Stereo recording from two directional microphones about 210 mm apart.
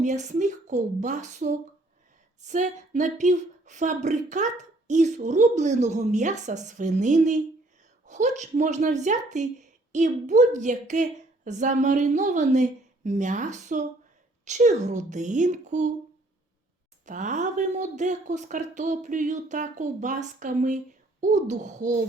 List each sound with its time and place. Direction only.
0.0 s speech: 35° right (ahead or behind)
17.1 s speech: 35° right (ahead or behind)